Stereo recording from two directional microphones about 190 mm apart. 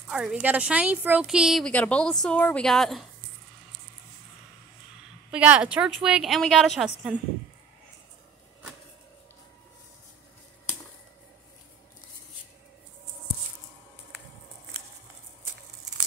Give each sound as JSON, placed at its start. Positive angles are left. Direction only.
{"t": 0.1, "sound": "a woman's voice", "side_deg": -5}
{"t": 5.3, "sound": "a woman's voice", "side_deg": -5}